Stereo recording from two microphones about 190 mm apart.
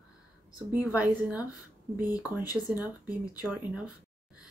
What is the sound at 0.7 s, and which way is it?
Speech, 10° right (ahead or behind).